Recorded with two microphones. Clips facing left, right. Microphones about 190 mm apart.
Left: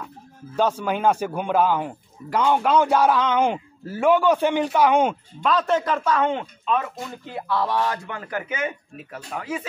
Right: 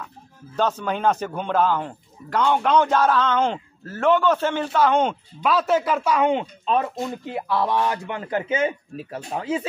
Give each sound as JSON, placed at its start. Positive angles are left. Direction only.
{"t": 0.6, "sound": "a man's voice", "side_deg": 10}
{"t": 5.4, "sound": "a man's voice", "side_deg": -5}
{"t": 6.6, "sound": "speech", "side_deg": -30}